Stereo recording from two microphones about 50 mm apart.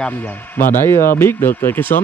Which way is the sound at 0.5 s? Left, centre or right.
Left.